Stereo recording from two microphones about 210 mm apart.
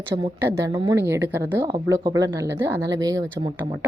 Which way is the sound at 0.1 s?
10° right (ahead or behind).